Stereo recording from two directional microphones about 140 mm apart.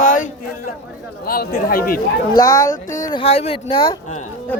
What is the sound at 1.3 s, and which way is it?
Speech, 90° left.